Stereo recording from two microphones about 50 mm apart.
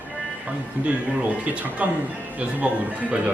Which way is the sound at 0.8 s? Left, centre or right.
Right.